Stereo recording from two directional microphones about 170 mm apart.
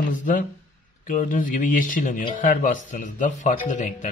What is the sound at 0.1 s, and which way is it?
Speech, 50° left (ahead or behind).